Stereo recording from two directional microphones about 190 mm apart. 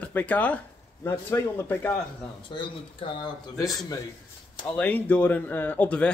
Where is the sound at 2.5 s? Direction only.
25° left (ahead or behind).